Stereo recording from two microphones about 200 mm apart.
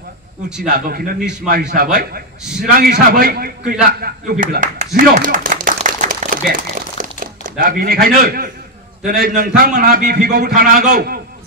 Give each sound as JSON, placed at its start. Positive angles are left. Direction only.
{"t": 0.7, "sound": "a man's voice", "side_deg": -45}
{"t": 2.4, "sound": "a man's voice", "side_deg": -5}
{"t": 2.8, "sound": "a man's voice", "side_deg": -50}
{"t": 3.8, "sound": "clapping", "side_deg": -45}
{"t": 6.5, "sound": "crumpling", "side_deg": -40}
{"t": 9.0, "sound": "a man's voice", "side_deg": -50}